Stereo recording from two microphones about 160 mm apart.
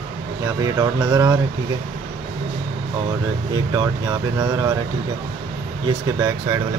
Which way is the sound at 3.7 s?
25° right (ahead or behind).